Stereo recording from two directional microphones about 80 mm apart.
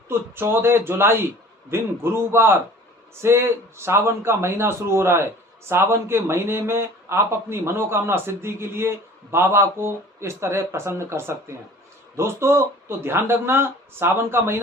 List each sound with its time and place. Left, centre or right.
0.1 s a man's voice: right